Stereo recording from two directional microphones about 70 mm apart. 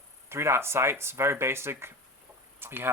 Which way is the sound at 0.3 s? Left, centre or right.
Right.